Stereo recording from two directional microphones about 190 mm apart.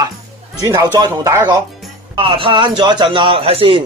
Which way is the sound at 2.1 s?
25° right (ahead or behind).